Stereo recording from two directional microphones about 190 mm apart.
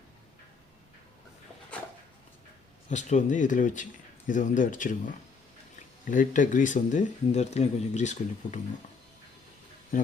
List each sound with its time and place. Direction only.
2.9 s speech: 40° left (ahead or behind)